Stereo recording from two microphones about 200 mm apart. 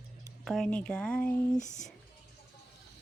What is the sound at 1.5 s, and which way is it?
Speech, 40° left (ahead or behind).